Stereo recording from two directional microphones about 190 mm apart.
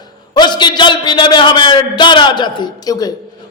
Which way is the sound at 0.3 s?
25° left (ahead or behind).